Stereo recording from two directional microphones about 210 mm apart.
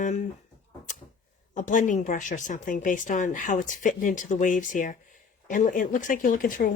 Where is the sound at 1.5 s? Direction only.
35° left (ahead or behind).